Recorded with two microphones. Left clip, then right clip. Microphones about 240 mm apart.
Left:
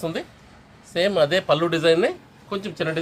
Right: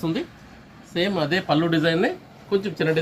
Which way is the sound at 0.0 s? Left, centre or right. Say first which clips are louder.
Right 1 dB; left.